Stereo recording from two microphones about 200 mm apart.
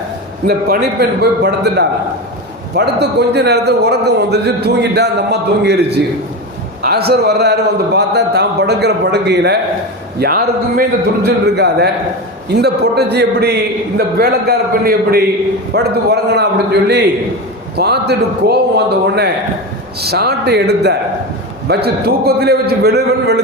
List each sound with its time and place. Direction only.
0.4 s a man's voice: 55° right (ahead or behind)
6.8 s a man's voice: 50° right (ahead or behind)